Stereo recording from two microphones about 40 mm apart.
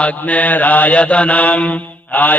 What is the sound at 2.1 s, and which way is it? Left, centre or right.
Mantra, left.